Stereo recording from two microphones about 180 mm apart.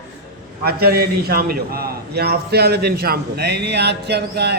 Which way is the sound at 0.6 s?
60° right (ahead or behind).